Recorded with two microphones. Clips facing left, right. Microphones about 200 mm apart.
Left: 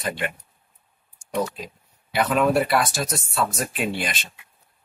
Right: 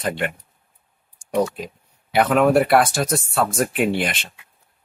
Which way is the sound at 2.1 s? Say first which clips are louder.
Right 4 dB; 55° right (ahead or behind).